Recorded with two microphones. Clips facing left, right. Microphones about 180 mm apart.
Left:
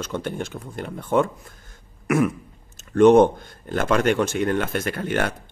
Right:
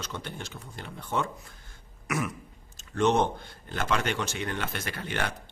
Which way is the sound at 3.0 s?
55° left (ahead or behind).